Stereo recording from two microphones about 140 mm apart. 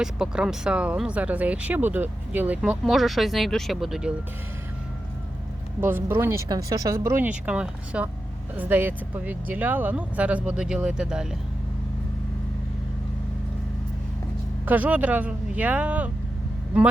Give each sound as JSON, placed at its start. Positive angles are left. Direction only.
{"t": 0.0, "sound": "speech", "side_deg": -5}
{"t": 5.8, "sound": "speech", "side_deg": -15}
{"t": 14.6, "sound": "speech", "side_deg": -10}